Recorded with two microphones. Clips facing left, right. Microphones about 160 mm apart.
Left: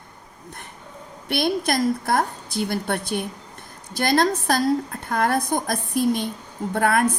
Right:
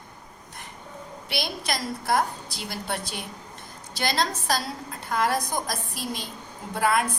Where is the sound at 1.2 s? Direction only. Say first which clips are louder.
Left 9 dB; 55° left (ahead or behind).